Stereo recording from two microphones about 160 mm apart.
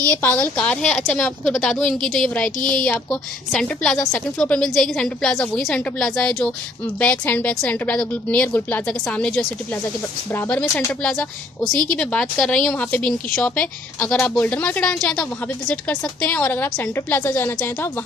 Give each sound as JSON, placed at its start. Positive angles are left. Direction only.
{"t": 0.1, "sound": "a woman's voice", "side_deg": 10}